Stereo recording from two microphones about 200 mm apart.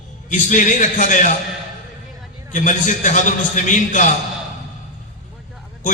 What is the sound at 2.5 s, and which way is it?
A man's voice, 40° left (ahead or behind).